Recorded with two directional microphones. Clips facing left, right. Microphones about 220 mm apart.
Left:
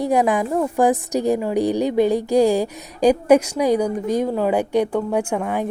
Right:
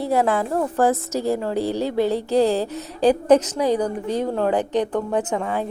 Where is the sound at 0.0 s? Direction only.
15° left (ahead or behind).